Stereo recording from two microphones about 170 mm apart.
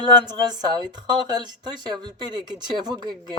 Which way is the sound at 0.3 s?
25° right (ahead or behind).